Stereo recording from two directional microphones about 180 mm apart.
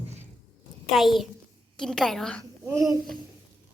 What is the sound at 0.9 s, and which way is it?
A woman's voice, centre (ahead or behind).